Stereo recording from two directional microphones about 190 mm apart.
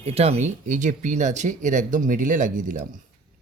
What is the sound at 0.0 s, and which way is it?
Speech, 35° right (ahead or behind).